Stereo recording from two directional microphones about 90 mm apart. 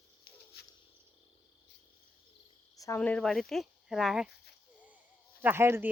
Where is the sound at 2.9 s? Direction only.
15° left (ahead or behind).